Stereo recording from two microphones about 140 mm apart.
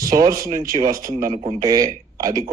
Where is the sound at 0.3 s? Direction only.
25° right (ahead or behind).